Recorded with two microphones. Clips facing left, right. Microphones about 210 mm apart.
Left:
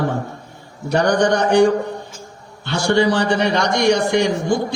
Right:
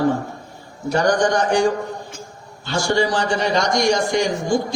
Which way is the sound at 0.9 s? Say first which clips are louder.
Left 2 dB; 65° left (ahead or behind).